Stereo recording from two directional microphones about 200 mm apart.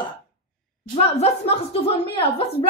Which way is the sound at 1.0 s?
30° left (ahead or behind).